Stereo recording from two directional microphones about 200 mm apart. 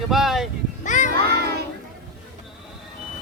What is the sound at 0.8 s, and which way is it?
Speech, 40° left (ahead or behind).